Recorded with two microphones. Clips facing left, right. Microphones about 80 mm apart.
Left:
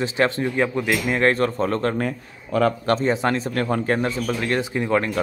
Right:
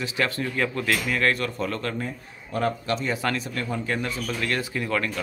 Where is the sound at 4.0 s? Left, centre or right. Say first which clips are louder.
Left 5 dB; left.